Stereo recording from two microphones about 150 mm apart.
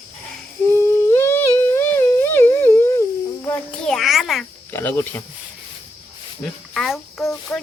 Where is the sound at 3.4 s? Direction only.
5° left (ahead or behind).